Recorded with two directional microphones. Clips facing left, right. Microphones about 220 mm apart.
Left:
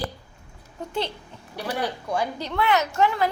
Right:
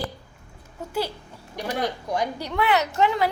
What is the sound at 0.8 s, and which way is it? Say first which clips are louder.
Speech: right 1 dB; 5° right (ahead or behind).